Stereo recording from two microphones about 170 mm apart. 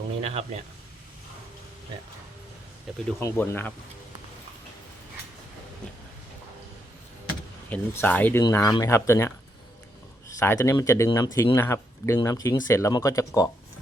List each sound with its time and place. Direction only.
0.2 s speech: 40° right (ahead or behind)
3.2 s speech: 15° left (ahead or behind)
7.7 s speech: 10° left (ahead or behind)
10.4 s speech: 15° left (ahead or behind)